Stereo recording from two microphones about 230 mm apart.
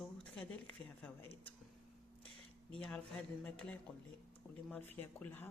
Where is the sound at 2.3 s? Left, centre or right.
Centre.